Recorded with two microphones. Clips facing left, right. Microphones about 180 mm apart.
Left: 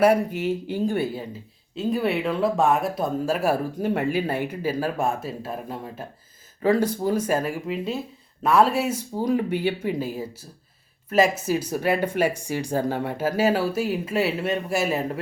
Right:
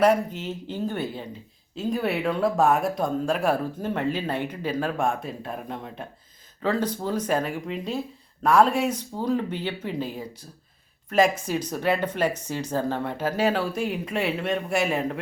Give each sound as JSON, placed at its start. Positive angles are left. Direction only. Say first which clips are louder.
{"t": 0.0, "sound": "speech", "louder": "left 2 dB", "side_deg": 10}